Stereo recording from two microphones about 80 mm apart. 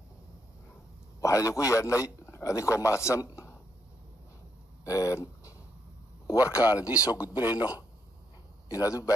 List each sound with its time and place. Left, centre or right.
1.2 s a man's voice: left
4.8 s a sound: left
6.3 s speech: right
8.6 s a man's voice: left